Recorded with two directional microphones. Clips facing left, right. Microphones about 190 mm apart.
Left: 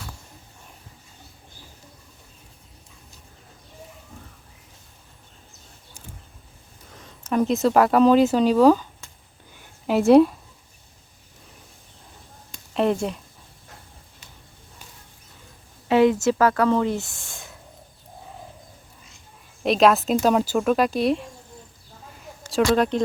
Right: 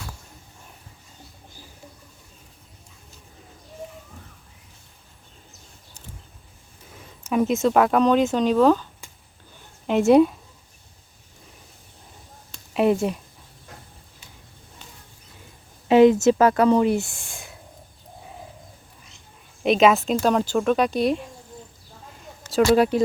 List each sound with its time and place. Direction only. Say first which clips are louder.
7.3 s a woman's voice: even; 5° right (ahead or behind)
12.7 s speech: right 2 dB; 5° right (ahead or behind)
15.9 s a woman's voice: right 4 dB; 20° right (ahead or behind)
19.6 s speech: even; centre (ahead or behind)
22.5 s speech: right 2 dB; 5° right (ahead or behind)